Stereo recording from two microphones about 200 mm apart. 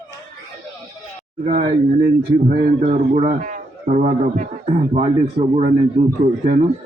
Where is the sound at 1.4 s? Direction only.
40° right (ahead or behind).